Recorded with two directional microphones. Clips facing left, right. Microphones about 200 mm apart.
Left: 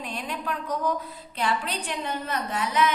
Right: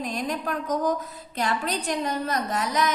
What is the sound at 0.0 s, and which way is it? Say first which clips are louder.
A woman's voice: right 4 dB; 40° right (ahead or behind).